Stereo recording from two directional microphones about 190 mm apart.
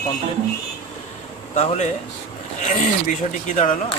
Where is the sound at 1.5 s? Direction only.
40° left (ahead or behind).